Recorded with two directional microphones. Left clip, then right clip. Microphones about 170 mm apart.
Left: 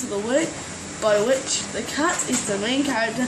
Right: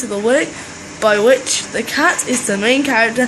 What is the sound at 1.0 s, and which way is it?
Speech, 45° right (ahead or behind).